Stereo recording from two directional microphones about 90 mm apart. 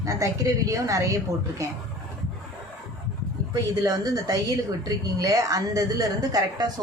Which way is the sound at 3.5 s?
45° right (ahead or behind).